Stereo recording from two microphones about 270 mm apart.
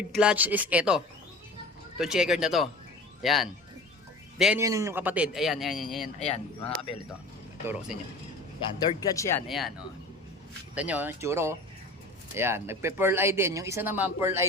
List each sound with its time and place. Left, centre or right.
0.1 s a man's voice: centre
6.1 s speech: left
7.7 s a man's voice: centre
8.9 s speech: centre
9.5 s a man's voice: centre
10.8 s speech: centre